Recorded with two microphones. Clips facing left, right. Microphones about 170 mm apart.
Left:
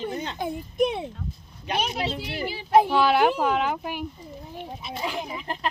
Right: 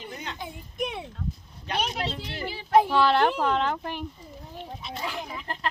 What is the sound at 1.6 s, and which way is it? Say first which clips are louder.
Speech: left 2 dB; 10° left (ahead or behind).